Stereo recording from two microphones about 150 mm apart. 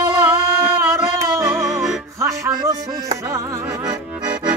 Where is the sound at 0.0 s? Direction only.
20° right (ahead or behind).